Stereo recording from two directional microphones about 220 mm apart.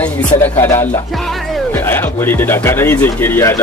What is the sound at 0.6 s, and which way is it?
Speech, 10° left (ahead or behind).